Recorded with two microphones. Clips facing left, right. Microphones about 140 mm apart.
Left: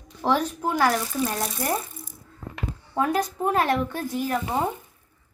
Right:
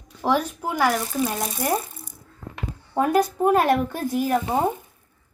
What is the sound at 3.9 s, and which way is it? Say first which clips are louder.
Speech: right 4 dB; 5° right (ahead or behind).